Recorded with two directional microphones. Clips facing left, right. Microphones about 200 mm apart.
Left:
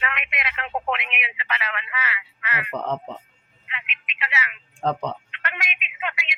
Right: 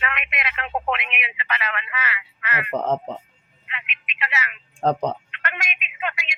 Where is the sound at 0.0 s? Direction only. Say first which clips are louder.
Right 1 dB; 55° right (ahead or behind).